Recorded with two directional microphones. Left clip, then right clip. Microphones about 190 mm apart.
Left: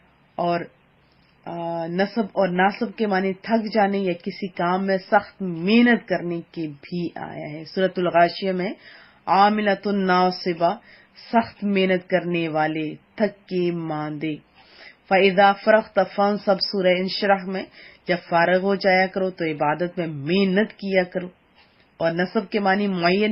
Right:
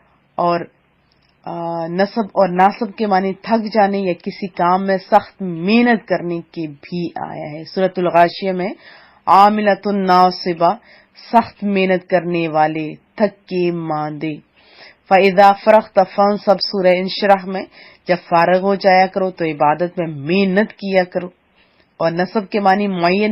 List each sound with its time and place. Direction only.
0.3 s speech: 20° right (ahead or behind)